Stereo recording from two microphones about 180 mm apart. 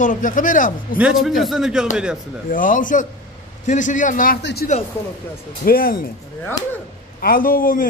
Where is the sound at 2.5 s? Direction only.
50° left (ahead or behind).